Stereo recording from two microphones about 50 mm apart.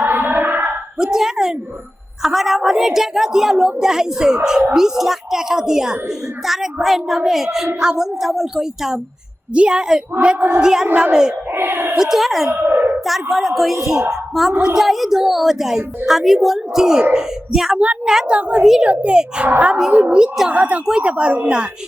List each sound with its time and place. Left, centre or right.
0.0 s a sound: right
0.9 s a child's voice: centre
9.5 s a child's voice: centre
11.5 s speech: right
11.9 s a woman's voice: centre
12.5 s a sound: right
13.1 s a woman's voice: centre
17.7 s a woman's voice: right
20.5 s a woman's voice: right